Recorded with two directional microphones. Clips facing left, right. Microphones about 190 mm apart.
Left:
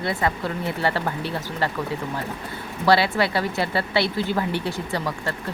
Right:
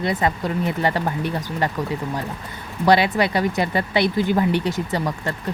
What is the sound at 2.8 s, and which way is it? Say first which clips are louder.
Speech: right 2 dB; 20° right (ahead or behind).